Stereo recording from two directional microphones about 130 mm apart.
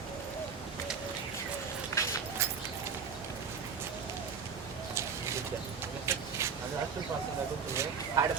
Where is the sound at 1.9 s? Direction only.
25° left (ahead or behind).